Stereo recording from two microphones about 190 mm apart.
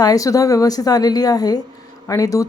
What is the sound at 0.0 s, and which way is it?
A woman's voice, 20° left (ahead or behind).